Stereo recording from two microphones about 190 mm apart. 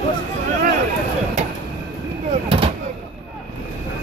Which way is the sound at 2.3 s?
30° right (ahead or behind).